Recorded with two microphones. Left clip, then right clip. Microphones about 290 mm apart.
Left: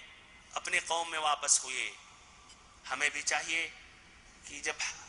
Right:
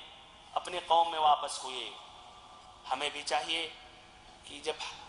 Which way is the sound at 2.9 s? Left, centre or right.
Left.